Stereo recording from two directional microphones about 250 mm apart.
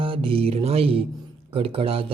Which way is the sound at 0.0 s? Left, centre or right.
Right.